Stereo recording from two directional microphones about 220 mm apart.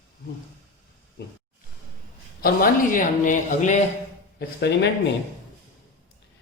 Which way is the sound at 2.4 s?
40° left (ahead or behind).